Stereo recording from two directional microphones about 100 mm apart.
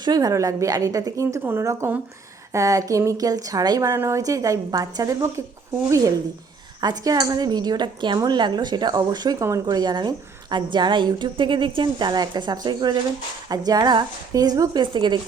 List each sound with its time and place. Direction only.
0.0 s a woman's voice: 40° right (ahead or behind)
3.8 s a woman's voice: 30° right (ahead or behind)
6.8 s a woman's voice: 40° right (ahead or behind)